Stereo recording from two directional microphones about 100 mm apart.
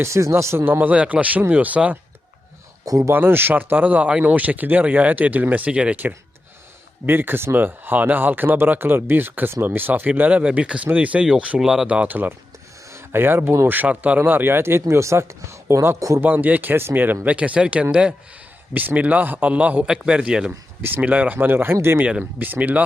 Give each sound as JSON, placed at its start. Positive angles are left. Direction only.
{"t": 0.0, "sound": "speech", "side_deg": -30}
{"t": 2.8, "sound": "speech", "side_deg": -35}
{"t": 3.2, "sound": "speech", "side_deg": -20}
{"t": 16.2, "sound": "speech", "side_deg": -20}